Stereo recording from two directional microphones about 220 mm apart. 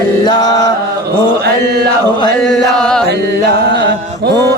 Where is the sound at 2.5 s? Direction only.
5° left (ahead or behind).